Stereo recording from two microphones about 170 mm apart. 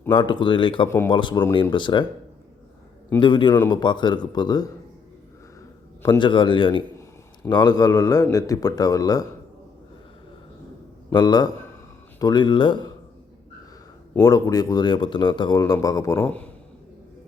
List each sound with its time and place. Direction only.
0.1 s speech: 30° left (ahead or behind)
0.9 s a man's voice: 15° left (ahead or behind)
1.1 s speech: 30° left (ahead or behind)
3.2 s speech: 30° left (ahead or behind)
6.0 s speech: 25° left (ahead or behind)
11.1 s speech: 25° left (ahead or behind)
14.2 s speech: 20° left (ahead or behind)